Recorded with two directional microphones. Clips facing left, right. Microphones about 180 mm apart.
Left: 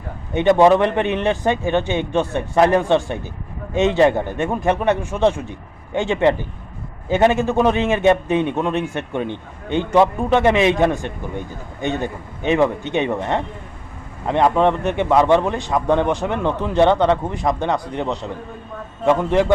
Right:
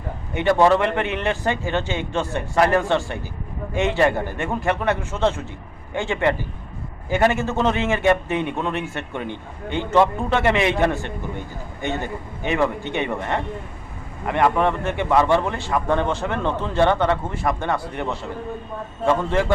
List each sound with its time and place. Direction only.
0.3 s a man's voice: 20° left (ahead or behind)